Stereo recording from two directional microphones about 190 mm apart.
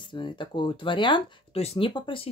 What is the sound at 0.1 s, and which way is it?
Speech, 25° left (ahead or behind).